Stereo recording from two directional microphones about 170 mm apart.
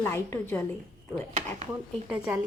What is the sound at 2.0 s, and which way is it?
Speech, 5° right (ahead or behind).